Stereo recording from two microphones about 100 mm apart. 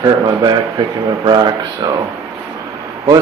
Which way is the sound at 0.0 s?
45° right (ahead or behind).